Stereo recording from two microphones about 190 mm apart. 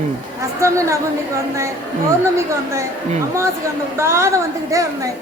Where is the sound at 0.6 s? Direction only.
15° right (ahead or behind).